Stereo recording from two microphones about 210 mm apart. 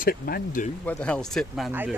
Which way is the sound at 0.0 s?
45° left (ahead or behind).